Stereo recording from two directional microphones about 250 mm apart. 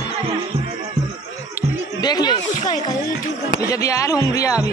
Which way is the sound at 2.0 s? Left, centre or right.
Centre.